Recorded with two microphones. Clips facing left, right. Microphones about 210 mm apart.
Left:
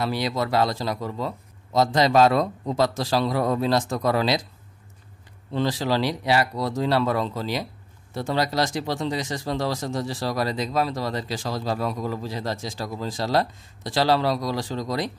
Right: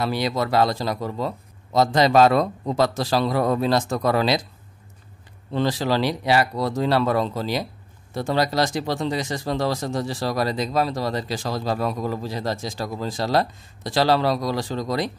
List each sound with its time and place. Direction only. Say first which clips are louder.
0.0 s speech: right 2 dB; 50° right (ahead or behind)
1.7 s a man's voice: right 2 dB; 55° right (ahead or behind)
5.5 s a man's voice: right 2 dB; 60° right (ahead or behind)